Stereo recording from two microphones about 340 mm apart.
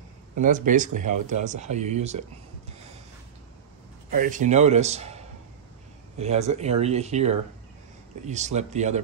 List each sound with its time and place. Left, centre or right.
0.4 s speech: right
4.1 s speech: right